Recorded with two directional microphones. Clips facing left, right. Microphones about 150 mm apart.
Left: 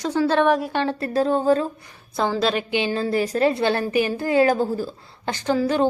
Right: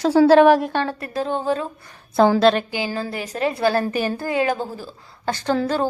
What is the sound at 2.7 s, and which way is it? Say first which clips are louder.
A woman's voice: left 4 dB; 25° left (ahead or behind).